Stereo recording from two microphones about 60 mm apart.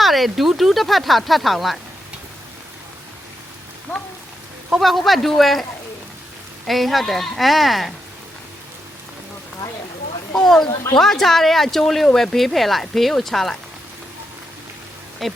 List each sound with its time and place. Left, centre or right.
0.0 s speech: centre
4.8 s speech: centre
6.7 s speech: centre
10.4 s speech: centre
15.2 s speech: centre